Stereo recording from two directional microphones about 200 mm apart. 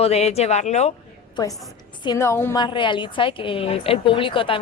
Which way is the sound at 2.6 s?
25° left (ahead or behind).